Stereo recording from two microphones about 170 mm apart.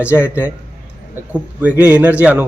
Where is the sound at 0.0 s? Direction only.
10° right (ahead or behind).